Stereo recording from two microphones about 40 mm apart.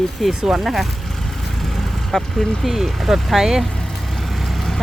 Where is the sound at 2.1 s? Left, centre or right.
Centre.